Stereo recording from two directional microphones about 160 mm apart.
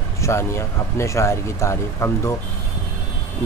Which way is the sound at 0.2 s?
15° left (ahead or behind).